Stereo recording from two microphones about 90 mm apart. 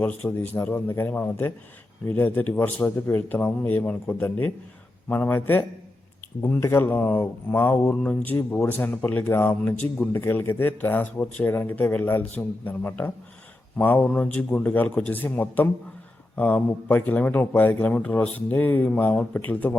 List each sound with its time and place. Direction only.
0.3 s speech: 25° left (ahead or behind)
6.4 s speech: 30° left (ahead or behind)